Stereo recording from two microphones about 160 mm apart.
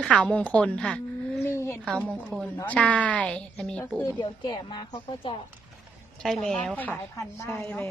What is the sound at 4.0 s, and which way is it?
Speech, 25° left (ahead or behind).